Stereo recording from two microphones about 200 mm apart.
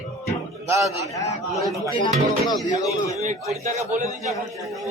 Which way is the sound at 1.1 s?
15° left (ahead or behind).